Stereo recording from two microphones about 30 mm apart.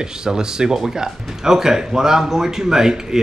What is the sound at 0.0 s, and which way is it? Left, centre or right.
Speech, right.